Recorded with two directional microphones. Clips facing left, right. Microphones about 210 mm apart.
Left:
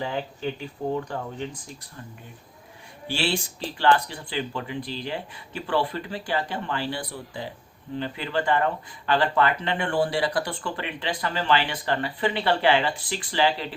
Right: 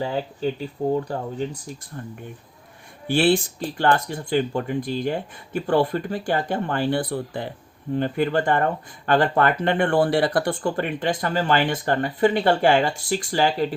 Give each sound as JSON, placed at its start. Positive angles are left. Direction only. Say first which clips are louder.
{"t": 0.0, "sound": "speech", "louder": "right 4 dB", "side_deg": -35}
{"t": 3.1, "sound": "speech", "louder": "right 9 dB", "side_deg": -55}